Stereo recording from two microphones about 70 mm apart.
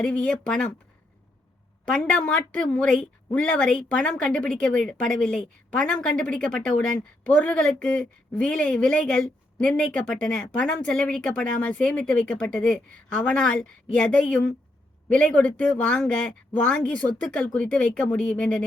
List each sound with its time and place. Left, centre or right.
0.0 s speech: centre
1.8 s speech: centre
2.9 s speech: centre